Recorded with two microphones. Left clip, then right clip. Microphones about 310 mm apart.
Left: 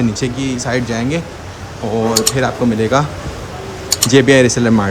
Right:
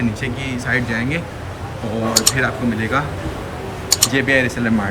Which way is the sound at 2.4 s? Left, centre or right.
Centre.